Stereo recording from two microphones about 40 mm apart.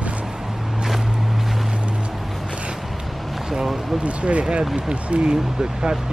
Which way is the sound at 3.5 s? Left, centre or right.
Centre.